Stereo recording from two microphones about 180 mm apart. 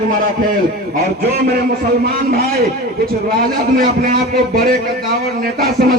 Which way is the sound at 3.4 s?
55° right (ahead or behind).